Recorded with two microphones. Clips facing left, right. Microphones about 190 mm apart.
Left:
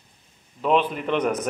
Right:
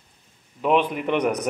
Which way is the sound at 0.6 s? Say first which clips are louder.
Right 1 dB; 15° right (ahead or behind).